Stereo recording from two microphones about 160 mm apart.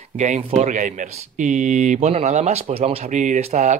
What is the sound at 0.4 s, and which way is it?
Speech, 40° right (ahead or behind).